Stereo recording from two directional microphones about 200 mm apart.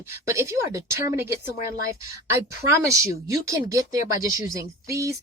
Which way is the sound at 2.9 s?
15° right (ahead or behind).